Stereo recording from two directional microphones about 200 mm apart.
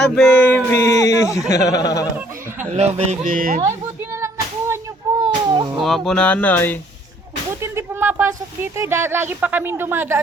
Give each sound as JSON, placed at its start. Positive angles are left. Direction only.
{"t": 0.0, "sound": "speech", "side_deg": 5}
{"t": 2.6, "sound": "a man's voice", "side_deg": -35}
{"t": 5.2, "sound": "a sound", "side_deg": -20}
{"t": 5.8, "sound": "speech", "side_deg": 0}
{"t": 7.6, "sound": "a sound", "side_deg": -10}
{"t": 8.6, "sound": "speech", "side_deg": -10}